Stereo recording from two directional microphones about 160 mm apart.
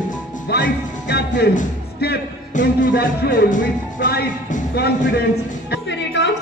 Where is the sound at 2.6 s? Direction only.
65° left (ahead or behind).